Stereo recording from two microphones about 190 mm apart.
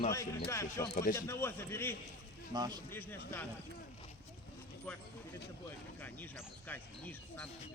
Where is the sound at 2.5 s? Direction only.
20° right (ahead or behind).